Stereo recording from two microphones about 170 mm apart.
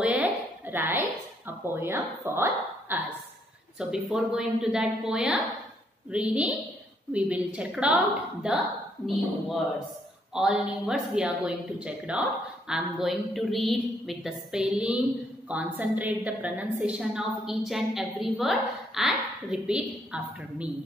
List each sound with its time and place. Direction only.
0.0 s a sound: 10° right (ahead or behind)
1.8 s a woman's voice: 15° right (ahead or behind)
10.3 s a woman's voice: 5° right (ahead or behind)